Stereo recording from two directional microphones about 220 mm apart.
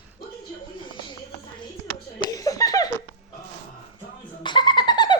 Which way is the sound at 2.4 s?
15° left (ahead or behind).